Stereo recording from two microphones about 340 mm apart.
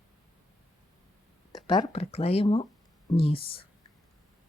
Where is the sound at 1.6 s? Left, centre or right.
Centre.